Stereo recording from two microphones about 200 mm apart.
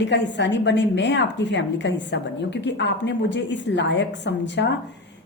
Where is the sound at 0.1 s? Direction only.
60° left (ahead or behind).